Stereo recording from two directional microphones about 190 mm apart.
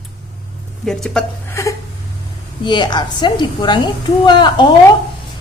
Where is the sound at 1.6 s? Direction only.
15° left (ahead or behind).